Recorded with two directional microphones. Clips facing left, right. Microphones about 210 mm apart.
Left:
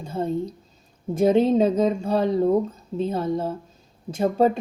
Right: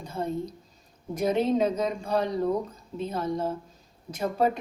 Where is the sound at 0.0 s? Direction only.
25° left (ahead or behind).